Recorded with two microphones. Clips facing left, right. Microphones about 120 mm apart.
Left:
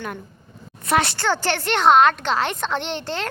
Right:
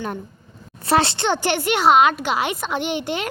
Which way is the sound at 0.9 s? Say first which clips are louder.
Right 2 dB; 30° right (ahead or behind).